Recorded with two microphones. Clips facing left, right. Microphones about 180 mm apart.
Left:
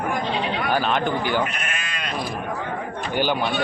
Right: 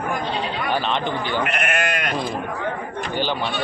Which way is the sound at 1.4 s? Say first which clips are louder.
Right 8 dB; 70° right (ahead or behind).